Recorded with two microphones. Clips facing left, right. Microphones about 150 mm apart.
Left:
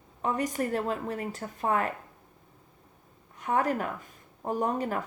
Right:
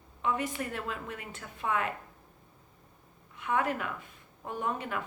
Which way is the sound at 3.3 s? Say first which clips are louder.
Left 3 dB; 40° left (ahead or behind).